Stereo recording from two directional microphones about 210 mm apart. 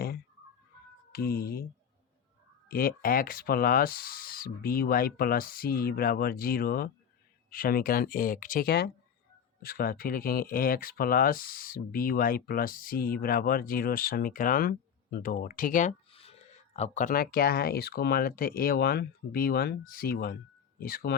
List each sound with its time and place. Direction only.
1.1 s speech: 45° left (ahead or behind)
2.6 s speech: 45° left (ahead or behind)